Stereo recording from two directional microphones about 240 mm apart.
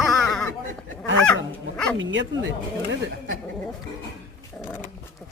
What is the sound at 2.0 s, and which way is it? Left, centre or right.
Speech, right.